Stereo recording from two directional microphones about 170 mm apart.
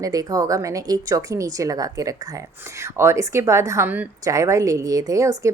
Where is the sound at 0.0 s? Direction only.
20° right (ahead or behind).